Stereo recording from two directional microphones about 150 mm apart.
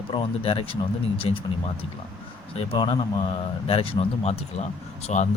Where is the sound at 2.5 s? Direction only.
35° left (ahead or behind).